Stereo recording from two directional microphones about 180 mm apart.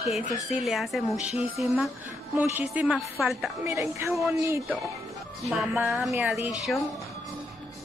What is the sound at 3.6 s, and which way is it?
Speech, 15° right (ahead or behind).